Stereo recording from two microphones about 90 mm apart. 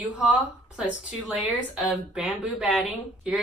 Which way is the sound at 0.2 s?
10° right (ahead or behind).